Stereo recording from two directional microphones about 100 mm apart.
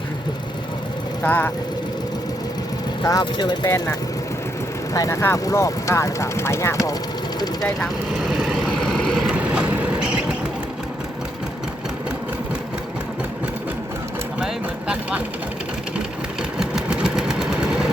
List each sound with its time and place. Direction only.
1.2 s speech: 20° left (ahead or behind)
3.0 s speech: 40° left (ahead or behind)
3.7 s speech: 30° left (ahead or behind)
4.9 s speech: 35° left (ahead or behind)
7.6 s vehicle: 5° left (ahead or behind)
9.3 s vehicle: 15° right (ahead or behind)
14.3 s speech: 10° right (ahead or behind)
16.6 s a sound: 5° right (ahead or behind)